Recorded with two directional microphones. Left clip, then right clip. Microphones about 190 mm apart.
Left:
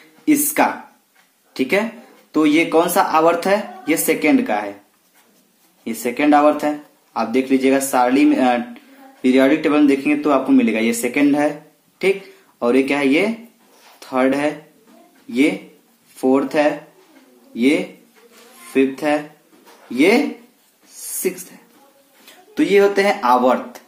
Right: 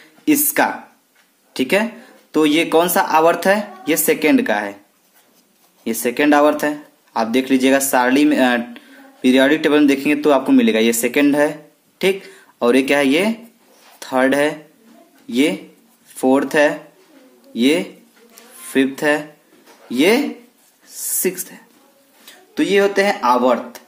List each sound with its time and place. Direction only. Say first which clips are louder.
0.2 s speech: even; 30° right (ahead or behind)
5.9 s speech: right 1 dB; 35° right (ahead or behind)
22.2 s speech: left 1 dB; 15° right (ahead or behind)